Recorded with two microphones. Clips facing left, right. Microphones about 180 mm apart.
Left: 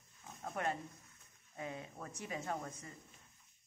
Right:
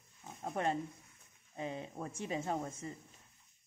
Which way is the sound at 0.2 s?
30° right (ahead or behind).